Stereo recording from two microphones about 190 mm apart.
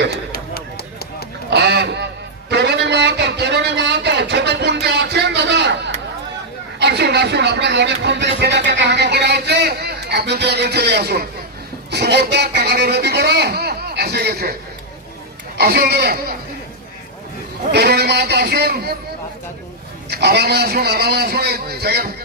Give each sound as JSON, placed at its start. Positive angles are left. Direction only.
{"t": 0.3, "sound": "a sound", "side_deg": 55}
{"t": 1.5, "sound": "a sound", "side_deg": -60}
{"t": 11.9, "sound": "speech", "side_deg": -60}
{"t": 15.5, "sound": "a man's voice", "side_deg": -55}
{"t": 17.7, "sound": "a man's voice", "side_deg": -60}
{"t": 20.1, "sound": "a man's voice", "side_deg": -60}